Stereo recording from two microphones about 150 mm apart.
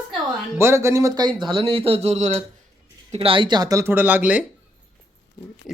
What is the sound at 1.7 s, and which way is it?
Speech, 40° right (ahead or behind).